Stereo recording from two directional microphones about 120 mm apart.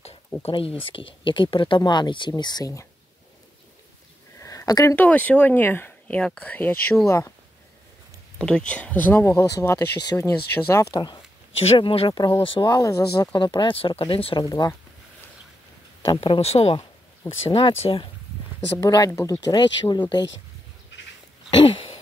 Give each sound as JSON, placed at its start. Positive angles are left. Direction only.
{"t": 0.4, "sound": "speech", "side_deg": 50}
{"t": 4.4, "sound": "a sound", "side_deg": 25}
{"t": 4.9, "sound": "speech", "side_deg": 15}
{"t": 8.4, "sound": "speech", "side_deg": 10}
{"t": 11.6, "sound": "speech", "side_deg": 55}
{"t": 12.1, "sound": "speech", "side_deg": 40}
{"t": 12.7, "sound": "speech", "side_deg": 30}
{"t": 13.4, "sound": "speech", "side_deg": 45}
{"t": 16.0, "sound": "speech", "side_deg": 45}
{"t": 18.8, "sound": "speech", "side_deg": 35}